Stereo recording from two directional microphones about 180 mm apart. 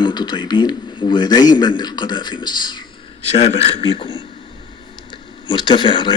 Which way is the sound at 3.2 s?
35° left (ahead or behind).